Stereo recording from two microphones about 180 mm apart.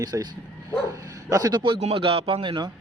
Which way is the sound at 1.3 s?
20° right (ahead or behind).